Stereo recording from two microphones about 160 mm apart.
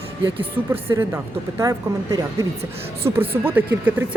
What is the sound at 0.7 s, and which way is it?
A woman's voice, 15° right (ahead or behind).